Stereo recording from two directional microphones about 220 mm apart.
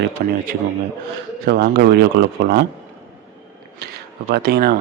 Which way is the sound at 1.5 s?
45° right (ahead or behind).